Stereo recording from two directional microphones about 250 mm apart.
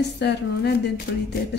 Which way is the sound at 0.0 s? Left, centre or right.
Left.